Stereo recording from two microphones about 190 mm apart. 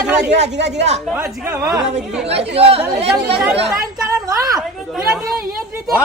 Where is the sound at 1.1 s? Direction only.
10° right (ahead or behind).